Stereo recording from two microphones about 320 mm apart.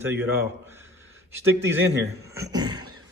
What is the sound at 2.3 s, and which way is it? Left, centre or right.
Speech, centre.